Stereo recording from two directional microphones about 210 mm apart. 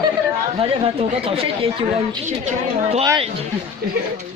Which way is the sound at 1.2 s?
25° right (ahead or behind).